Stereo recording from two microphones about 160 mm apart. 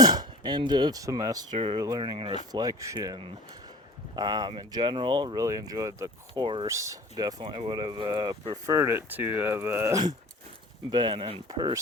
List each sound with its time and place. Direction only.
0.0 s speech: 25° right (ahead or behind)
1.5 s speech: 35° right (ahead or behind)
6.7 s speech: 20° right (ahead or behind)
10.9 s speech: 30° right (ahead or behind)